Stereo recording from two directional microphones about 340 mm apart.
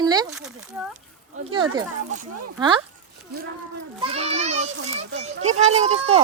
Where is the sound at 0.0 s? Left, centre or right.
Centre.